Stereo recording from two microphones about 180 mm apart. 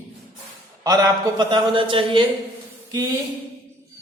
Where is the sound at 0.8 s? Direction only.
20° right (ahead or behind).